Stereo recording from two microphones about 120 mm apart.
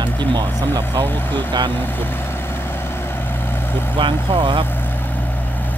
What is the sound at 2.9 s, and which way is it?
Vehicle, 20° left (ahead or behind).